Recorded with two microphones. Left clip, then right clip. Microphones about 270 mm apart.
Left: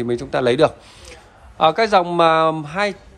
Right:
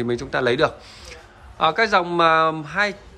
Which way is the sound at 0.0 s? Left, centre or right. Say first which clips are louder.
Left 3 dB; centre.